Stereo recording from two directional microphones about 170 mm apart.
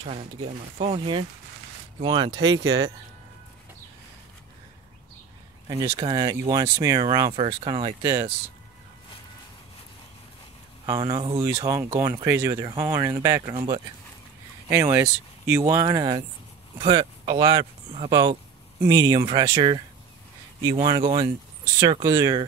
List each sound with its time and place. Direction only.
0.0 s speech: 35° right (ahead or behind)
2.3 s speech: 90° right
5.7 s speech: 25° right (ahead or behind)
10.9 s speech: 30° right (ahead or behind)
11.3 s speech: 20° right (ahead or behind)
14.7 s speech: 15° right (ahead or behind)